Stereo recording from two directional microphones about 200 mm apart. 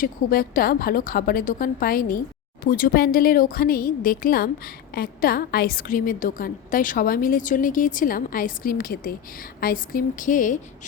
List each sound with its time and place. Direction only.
0.0 s a woman's voice: 45° left (ahead or behind)